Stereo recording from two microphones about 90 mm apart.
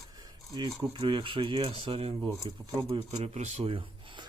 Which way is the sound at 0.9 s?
70° right (ahead or behind).